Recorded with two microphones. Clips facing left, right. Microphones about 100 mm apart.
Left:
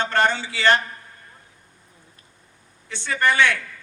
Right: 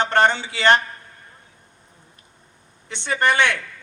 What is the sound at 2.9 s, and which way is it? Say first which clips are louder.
Speech: right 1 dB; 20° right (ahead or behind).